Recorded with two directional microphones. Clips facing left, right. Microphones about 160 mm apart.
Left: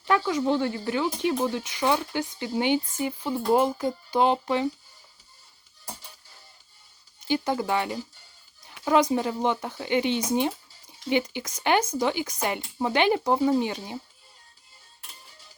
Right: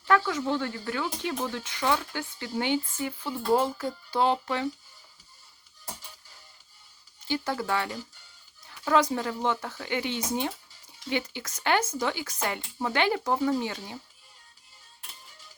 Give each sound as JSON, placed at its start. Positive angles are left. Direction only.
{"t": 0.0, "sound": "speech", "side_deg": 15}
{"t": 7.3, "sound": "speech", "side_deg": 15}